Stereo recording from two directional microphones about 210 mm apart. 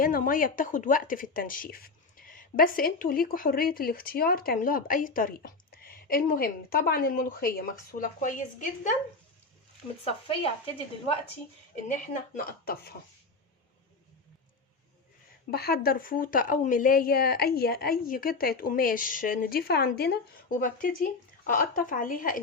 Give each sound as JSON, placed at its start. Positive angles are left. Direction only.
{"t": 0.0, "sound": "a woman's voice", "side_deg": 40}
{"t": 10.0, "sound": "speech", "side_deg": 25}
{"t": 11.7, "sound": "a woman's voice", "side_deg": 35}
{"t": 15.4, "sound": "a woman's voice", "side_deg": 45}